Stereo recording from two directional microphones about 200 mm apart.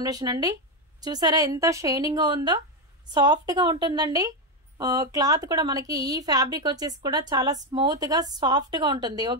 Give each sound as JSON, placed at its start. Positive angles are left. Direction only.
{"t": 0.0, "sound": "a woman's voice", "side_deg": -20}